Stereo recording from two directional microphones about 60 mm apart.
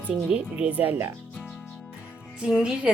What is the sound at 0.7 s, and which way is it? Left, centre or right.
Speech, right.